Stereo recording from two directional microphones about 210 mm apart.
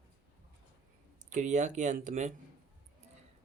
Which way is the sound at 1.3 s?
35° right (ahead or behind).